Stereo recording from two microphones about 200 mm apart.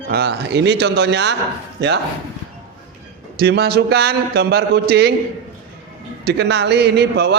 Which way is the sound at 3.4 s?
55° right (ahead or behind).